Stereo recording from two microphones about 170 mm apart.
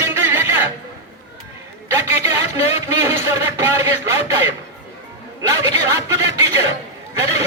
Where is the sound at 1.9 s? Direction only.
15° right (ahead or behind).